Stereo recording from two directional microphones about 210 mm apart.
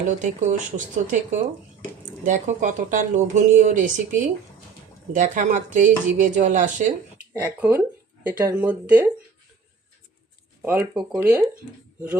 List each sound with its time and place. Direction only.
0.2 s speech: 35° right (ahead or behind)
7.3 s speech: 10° right (ahead or behind)
10.6 s speech: 10° right (ahead or behind)